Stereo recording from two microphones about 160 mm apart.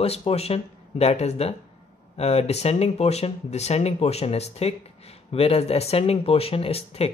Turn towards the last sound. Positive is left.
turn(degrees=40)  # may be behind; listen again after turning